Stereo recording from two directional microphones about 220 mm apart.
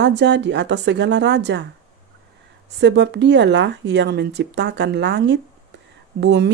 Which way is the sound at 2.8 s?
50° right (ahead or behind).